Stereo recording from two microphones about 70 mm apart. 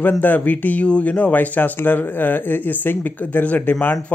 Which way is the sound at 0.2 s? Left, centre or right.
Left.